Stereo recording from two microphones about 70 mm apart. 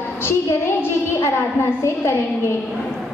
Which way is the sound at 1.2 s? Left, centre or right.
Left.